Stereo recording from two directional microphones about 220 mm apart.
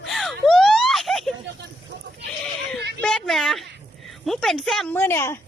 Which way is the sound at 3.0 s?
5° left (ahead or behind).